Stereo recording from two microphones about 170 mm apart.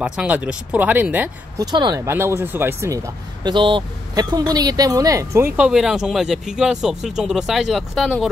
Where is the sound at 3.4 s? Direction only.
30° right (ahead or behind); by 8.2 s centre (ahead or behind).